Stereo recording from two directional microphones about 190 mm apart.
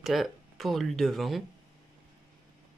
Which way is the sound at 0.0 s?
Centre (ahead or behind).